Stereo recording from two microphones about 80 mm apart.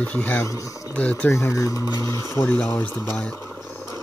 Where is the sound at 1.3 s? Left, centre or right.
Left.